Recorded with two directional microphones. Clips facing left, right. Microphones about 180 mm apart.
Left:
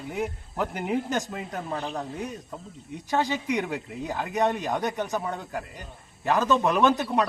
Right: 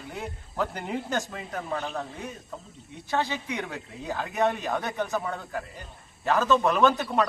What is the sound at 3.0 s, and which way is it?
A man's voice, 15° left (ahead or behind).